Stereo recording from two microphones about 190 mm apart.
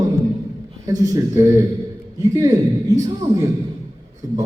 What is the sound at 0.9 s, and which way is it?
A man's voice, 20° right (ahead or behind).